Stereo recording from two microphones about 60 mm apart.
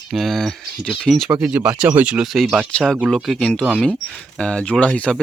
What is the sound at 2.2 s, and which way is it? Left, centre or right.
Speech, centre.